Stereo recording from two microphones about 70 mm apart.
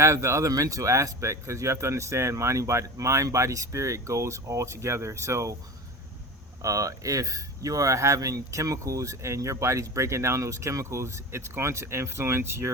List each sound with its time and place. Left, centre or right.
0.0 s speech: right
6.6 s speech: right